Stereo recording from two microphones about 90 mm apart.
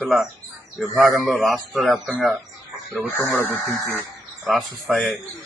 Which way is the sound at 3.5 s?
35° left (ahead or behind).